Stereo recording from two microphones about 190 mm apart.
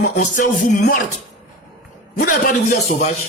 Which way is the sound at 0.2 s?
40° left (ahead or behind).